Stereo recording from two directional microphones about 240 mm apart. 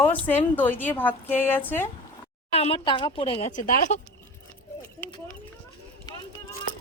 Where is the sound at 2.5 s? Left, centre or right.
Left.